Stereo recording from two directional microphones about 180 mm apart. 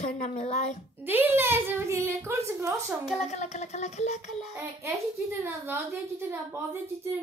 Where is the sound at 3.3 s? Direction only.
40° left (ahead or behind).